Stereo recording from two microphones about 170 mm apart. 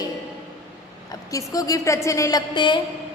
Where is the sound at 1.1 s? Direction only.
20° left (ahead or behind).